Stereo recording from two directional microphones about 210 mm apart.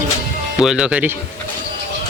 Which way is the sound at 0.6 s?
5° right (ahead or behind).